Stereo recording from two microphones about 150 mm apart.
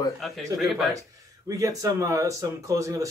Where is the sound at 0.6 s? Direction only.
Centre (ahead or behind).